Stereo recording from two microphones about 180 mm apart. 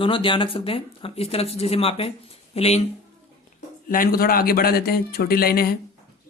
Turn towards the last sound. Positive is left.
turn(degrees=55)  # may be behind; listen again after turning